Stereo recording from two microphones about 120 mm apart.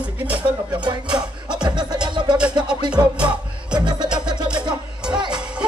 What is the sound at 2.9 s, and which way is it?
Music, 10° right (ahead or behind).